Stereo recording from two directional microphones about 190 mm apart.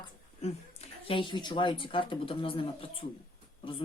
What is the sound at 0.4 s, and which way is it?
A woman's voice, 30° left (ahead or behind).